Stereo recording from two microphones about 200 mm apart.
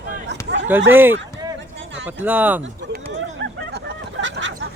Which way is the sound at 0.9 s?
10° right (ahead or behind).